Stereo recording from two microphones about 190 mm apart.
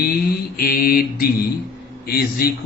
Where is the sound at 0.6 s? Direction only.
55° left (ahead or behind).